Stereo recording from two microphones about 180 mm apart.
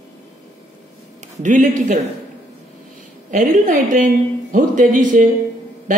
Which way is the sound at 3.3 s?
45° right (ahead or behind).